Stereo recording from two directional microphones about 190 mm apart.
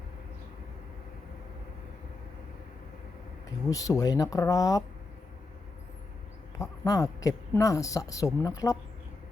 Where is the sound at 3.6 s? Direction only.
20° left (ahead or behind).